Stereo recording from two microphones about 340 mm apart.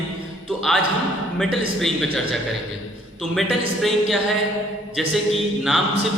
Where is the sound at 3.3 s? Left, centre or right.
Centre.